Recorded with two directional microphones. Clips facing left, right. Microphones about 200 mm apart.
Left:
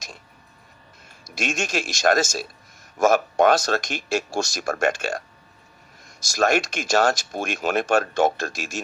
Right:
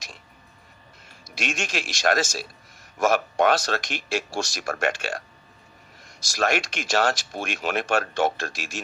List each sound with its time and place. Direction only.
1.4 s speech: 45° left (ahead or behind)